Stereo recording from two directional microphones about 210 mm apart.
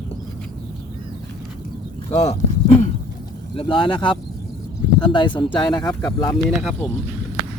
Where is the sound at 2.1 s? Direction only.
30° left (ahead or behind).